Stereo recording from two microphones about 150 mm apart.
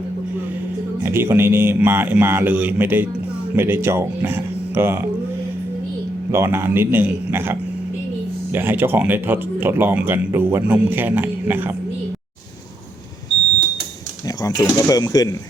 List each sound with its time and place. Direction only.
1.0 s speech: 15° right (ahead or behind)
6.3 s speech: 15° right (ahead or behind)
8.5 s speech: 15° right (ahead or behind)
14.3 s speech: 25° left (ahead or behind)